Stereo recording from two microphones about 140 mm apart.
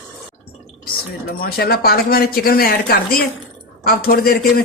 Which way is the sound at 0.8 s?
90° left.